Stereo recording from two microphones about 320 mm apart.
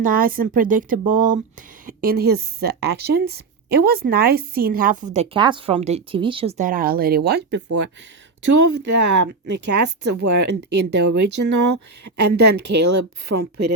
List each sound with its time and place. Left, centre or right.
0.0 s speech: right
8.9 s speech: right
10.2 s speech: right
11.1 s speech: right